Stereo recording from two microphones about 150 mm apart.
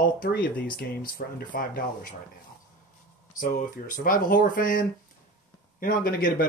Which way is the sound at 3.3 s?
65° left (ahead or behind).